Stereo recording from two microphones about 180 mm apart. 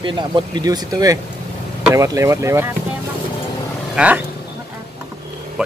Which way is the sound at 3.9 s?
10° right (ahead or behind).